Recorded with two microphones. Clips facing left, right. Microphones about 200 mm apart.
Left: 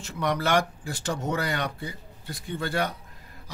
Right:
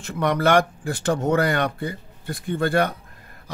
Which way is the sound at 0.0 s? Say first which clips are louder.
Right 6 dB; 55° right (ahead or behind).